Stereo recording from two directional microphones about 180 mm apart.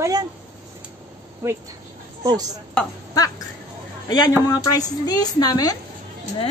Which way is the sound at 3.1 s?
20° left (ahead or behind).